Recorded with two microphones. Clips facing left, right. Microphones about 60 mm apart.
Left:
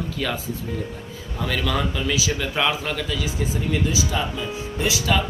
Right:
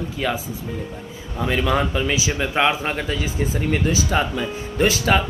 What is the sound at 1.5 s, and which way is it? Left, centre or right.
Speech, right.